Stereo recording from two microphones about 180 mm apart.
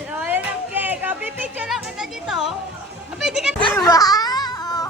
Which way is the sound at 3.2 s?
Centre (ahead or behind).